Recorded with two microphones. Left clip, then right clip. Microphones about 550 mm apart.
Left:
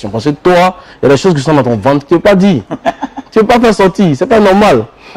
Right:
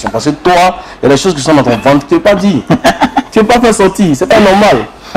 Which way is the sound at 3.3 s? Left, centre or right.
Left.